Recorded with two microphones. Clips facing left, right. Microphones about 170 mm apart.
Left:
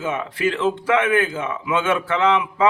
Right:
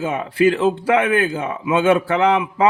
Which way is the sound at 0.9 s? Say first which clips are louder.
Even; 30° right (ahead or behind).